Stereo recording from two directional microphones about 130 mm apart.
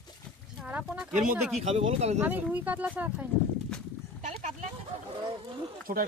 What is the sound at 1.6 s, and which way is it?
Speech, 55° right (ahead or behind).